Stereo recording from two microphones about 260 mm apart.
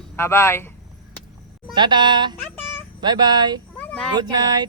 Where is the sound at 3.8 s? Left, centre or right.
Centre.